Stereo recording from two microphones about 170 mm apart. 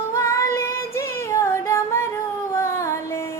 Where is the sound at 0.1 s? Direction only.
15° left (ahead or behind).